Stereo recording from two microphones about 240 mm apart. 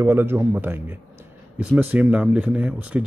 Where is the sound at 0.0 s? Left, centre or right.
Centre.